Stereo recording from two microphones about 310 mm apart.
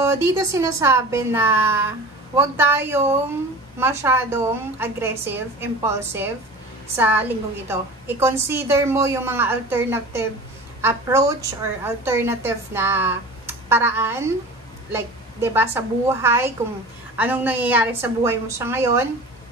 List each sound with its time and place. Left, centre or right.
0.0 s a woman's voice: centre